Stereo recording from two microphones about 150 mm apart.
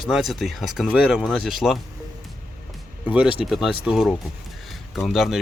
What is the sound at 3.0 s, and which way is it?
Speech, 10° right (ahead or behind).